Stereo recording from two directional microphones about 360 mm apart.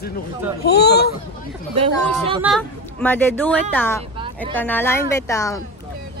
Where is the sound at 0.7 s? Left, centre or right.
Left.